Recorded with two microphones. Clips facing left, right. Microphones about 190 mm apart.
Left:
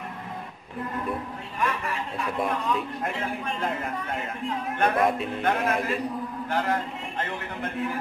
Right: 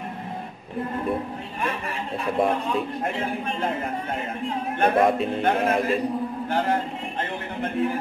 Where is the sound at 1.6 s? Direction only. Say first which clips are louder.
Left 1 dB; 30° right (ahead or behind).